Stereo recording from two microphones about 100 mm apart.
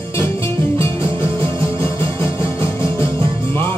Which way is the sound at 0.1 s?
25° left (ahead or behind).